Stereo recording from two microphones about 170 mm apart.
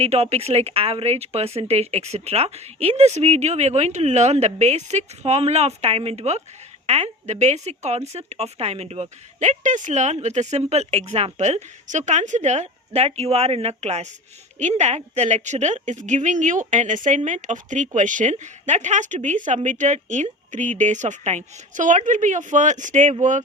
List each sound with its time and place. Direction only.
0.0 s a woman's voice: 40° right (ahead or behind)